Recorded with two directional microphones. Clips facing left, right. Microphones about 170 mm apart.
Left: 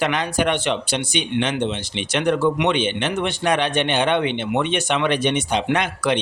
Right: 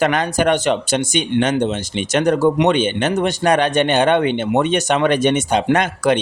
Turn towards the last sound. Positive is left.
turn(degrees=-45)  # may be behind; listen again after turning